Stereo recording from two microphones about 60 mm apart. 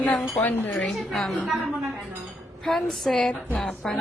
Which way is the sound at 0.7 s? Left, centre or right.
Centre.